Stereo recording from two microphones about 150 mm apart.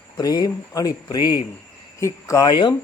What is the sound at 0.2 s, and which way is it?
Speech, 25° left (ahead or behind).